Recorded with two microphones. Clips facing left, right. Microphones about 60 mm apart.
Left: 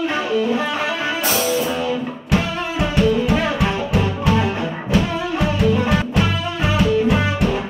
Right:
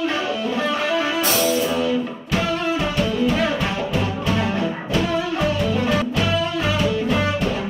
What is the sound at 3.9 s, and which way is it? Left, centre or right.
Music, centre.